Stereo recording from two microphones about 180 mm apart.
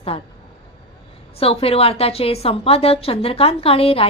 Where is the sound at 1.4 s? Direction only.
30° left (ahead or behind).